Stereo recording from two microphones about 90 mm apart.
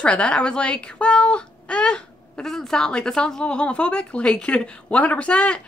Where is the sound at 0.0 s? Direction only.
15° left (ahead or behind).